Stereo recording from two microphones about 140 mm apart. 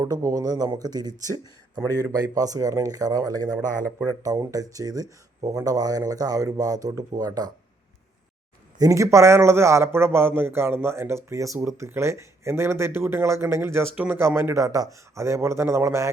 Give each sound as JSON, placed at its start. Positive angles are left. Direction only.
{"t": 0.0, "sound": "speech", "side_deg": -25}
{"t": 2.1, "sound": "speech", "side_deg": -25}
{"t": 8.8, "sound": "a man's voice", "side_deg": -20}